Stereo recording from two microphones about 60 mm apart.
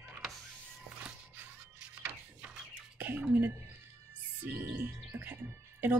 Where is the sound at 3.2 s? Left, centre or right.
Right.